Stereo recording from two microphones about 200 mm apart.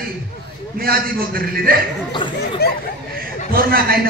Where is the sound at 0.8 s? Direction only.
45° right (ahead or behind).